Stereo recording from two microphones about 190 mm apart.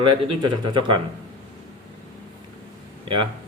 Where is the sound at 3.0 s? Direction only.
30° right (ahead or behind).